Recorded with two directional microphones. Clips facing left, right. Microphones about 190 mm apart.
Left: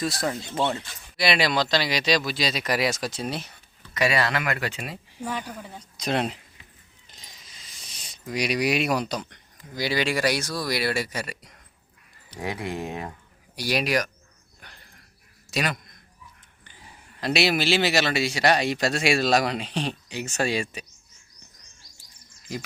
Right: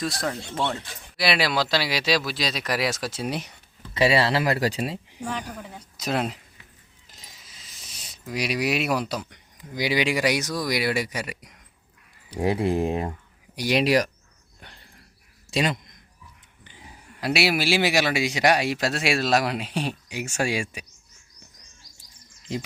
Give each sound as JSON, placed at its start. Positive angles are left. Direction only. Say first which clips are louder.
{"t": 0.0, "sound": "speech", "louder": "left 1 dB", "side_deg": 0}
{"t": 3.9, "sound": "speech", "louder": "right 4 dB", "side_deg": -30}
{"t": 5.2, "sound": "speech", "louder": "left 1 dB", "side_deg": 5}
{"t": 7.1, "sound": "a sound", "louder": "even", "side_deg": -5}
{"t": 9.6, "sound": "a man's voice", "louder": "right 2 dB", "side_deg": -15}
{"t": 12.4, "sound": "speech", "louder": "right 8 dB", "side_deg": -30}
{"t": 14.6, "sound": "a sound", "louder": "right 2 dB", "side_deg": -30}
{"t": 16.6, "sound": "a man's voice", "louder": "right 3 dB", "side_deg": -15}
{"t": 22.5, "sound": "speech", "louder": "right 3 dB", "side_deg": -25}